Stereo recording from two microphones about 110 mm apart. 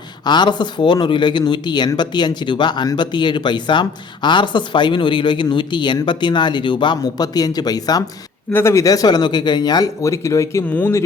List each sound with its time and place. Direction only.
0.3 s speech: 45° left (ahead or behind)
8.5 s speech: 25° left (ahead or behind)
10.7 s speech: 15° left (ahead or behind)